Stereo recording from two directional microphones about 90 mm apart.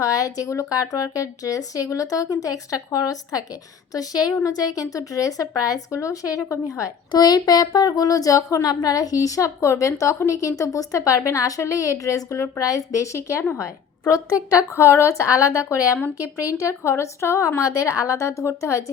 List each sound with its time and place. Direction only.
0.0 s speech: 40° left (ahead or behind)
7.1 s speech: 50° left (ahead or behind); by 13.4 s 35° left (ahead or behind)
14.5 s speech: 30° left (ahead or behind)